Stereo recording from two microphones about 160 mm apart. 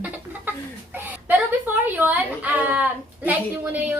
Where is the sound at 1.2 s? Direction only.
10° right (ahead or behind).